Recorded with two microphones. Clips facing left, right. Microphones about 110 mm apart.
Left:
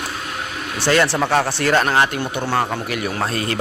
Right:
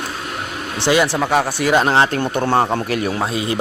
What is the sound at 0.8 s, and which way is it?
A man's voice, 15° right (ahead or behind).